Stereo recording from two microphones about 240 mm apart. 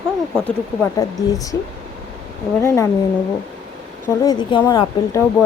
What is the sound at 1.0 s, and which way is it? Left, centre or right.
Speech, centre.